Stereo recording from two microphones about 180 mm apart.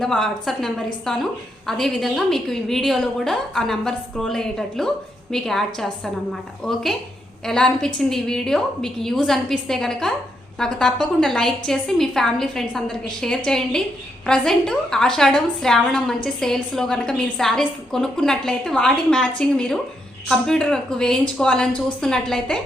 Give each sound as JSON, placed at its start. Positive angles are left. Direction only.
{"t": 0.0, "sound": "a woman's voice", "side_deg": 0}